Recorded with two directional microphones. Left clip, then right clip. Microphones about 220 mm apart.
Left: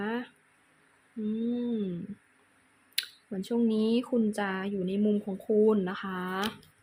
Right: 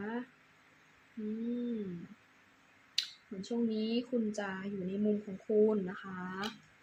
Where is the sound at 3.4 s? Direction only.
30° left (ahead or behind).